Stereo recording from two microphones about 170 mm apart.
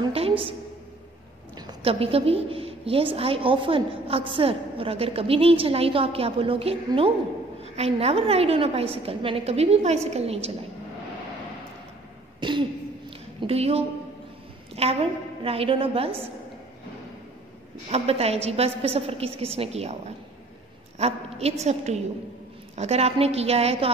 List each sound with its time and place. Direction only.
0.0 s a sound: 30° right (ahead or behind)
1.7 s a woman's voice: 35° right (ahead or behind)
12.4 s a woman's voice: 30° right (ahead or behind)
17.8 s a woman's voice: 35° right (ahead or behind)
21.0 s a woman's voice: 40° right (ahead or behind)